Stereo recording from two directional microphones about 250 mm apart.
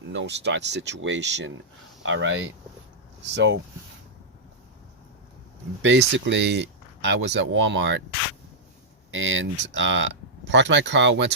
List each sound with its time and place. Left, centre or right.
0.1 s speech: right
5.8 s speech: right
9.1 s speech: right